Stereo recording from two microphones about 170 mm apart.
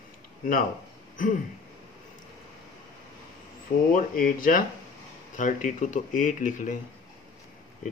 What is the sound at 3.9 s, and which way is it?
Speech, 55° left (ahead or behind).